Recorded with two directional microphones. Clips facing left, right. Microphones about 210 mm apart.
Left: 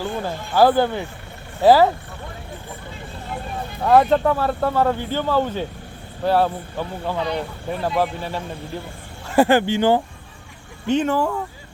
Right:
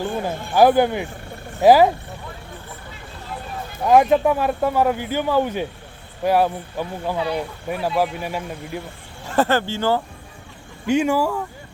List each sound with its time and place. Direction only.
0.0 s speech: 15° right (ahead or behind)
3.8 s speech: 10° right (ahead or behind)
9.3 s speech: 15° left (ahead or behind)
10.8 s speech: 10° right (ahead or behind)